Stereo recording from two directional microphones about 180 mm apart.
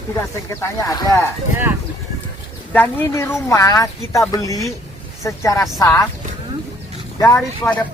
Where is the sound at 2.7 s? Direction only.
10° left (ahead or behind).